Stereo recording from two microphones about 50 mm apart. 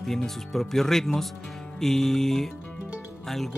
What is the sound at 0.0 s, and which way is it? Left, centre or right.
Speech, centre.